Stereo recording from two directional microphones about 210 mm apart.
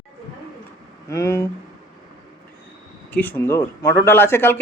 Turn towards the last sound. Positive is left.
turn(degrees=10)  # may be behind; listen again after turning